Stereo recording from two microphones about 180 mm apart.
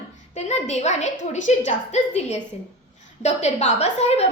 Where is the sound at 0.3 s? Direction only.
40° left (ahead or behind).